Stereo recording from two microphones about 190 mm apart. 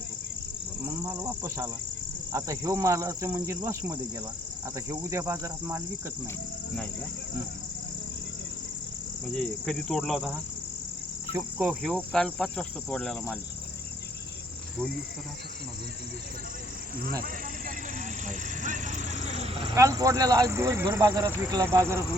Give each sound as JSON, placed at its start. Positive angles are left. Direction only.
{"t": 1.0, "sound": "insect", "side_deg": -20}
{"t": 2.3, "sound": "speech", "side_deg": -15}
{"t": 4.6, "sound": "insect", "side_deg": -15}
{"t": 9.3, "sound": "insect", "side_deg": 5}
{"t": 11.3, "sound": "insect", "side_deg": -10}
{"t": 17.1, "sound": "speech", "side_deg": -50}
{"t": 18.3, "sound": "vehicle", "side_deg": -40}
{"t": 19.7, "sound": "speech", "side_deg": -15}